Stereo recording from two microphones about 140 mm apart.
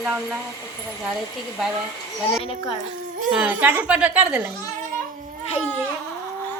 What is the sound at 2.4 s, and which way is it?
Speech, 40° left (ahead or behind).